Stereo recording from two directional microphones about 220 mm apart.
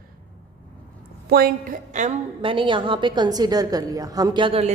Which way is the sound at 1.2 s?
45° right (ahead or behind).